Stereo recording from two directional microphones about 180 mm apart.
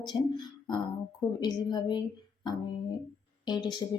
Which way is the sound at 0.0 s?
25° left (ahead or behind).